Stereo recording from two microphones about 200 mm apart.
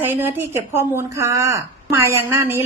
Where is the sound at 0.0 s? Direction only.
10° right (ahead or behind).